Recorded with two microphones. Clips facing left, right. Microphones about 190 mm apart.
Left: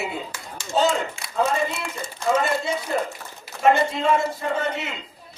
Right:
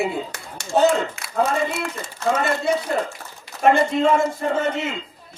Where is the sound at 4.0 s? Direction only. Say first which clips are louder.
Right 3 dB; 50° right (ahead or behind).